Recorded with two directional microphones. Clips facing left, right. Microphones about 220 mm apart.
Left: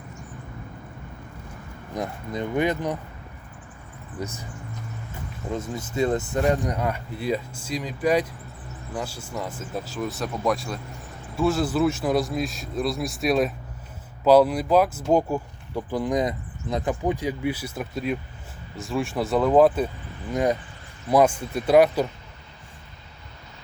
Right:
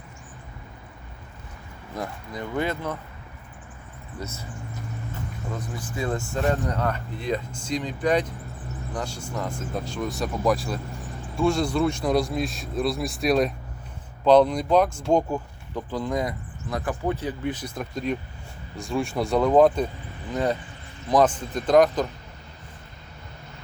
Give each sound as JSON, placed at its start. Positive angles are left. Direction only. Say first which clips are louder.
{"t": 2.0, "sound": "speech", "louder": "left 4 dB", "side_deg": 20}
{"t": 4.2, "sound": "speech", "louder": "left 3 dB", "side_deg": 15}
{"t": 5.5, "sound": "speech", "louder": "left 7 dB", "side_deg": 25}